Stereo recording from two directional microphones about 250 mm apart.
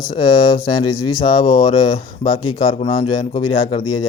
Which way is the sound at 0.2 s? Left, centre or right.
Centre.